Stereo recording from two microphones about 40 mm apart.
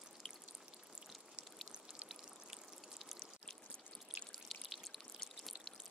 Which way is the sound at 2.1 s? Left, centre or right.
Centre.